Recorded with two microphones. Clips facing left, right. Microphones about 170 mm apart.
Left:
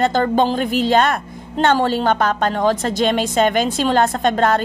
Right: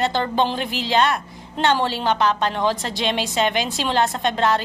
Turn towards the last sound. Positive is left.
turn(degrees=50)  # may be behind; listen again after turning